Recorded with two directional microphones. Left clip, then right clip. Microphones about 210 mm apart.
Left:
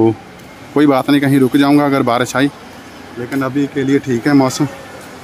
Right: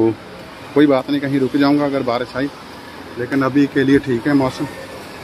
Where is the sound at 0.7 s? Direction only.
30° left (ahead or behind).